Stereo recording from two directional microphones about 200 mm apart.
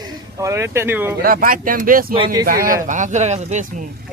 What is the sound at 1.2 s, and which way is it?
Speech, 45° right (ahead or behind).